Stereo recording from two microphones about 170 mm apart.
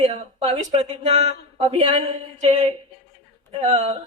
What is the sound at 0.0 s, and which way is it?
Speech, 35° right (ahead or behind).